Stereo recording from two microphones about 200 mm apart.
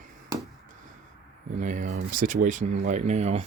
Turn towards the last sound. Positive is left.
turn(degrees=-35)  # may be behind; listen again after turning